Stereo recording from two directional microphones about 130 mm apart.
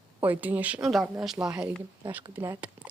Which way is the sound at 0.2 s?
15° right (ahead or behind).